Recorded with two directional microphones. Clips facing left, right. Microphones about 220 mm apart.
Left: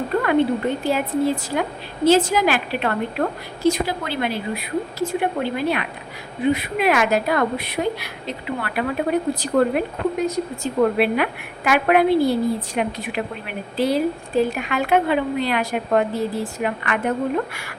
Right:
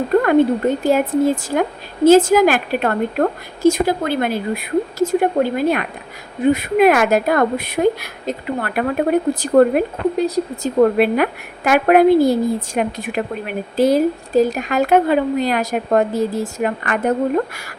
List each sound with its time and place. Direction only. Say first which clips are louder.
0.2 s a woman's voice: right 4 dB; 45° right (ahead or behind)
10.2 s a woman's voice: right 4 dB; 35° right (ahead or behind)